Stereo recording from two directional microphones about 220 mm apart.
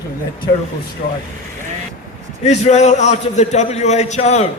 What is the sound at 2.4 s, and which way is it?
A man's voice, 30° left (ahead or behind).